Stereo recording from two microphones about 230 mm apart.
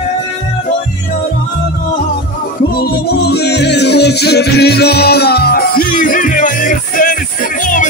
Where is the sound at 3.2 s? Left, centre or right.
Left.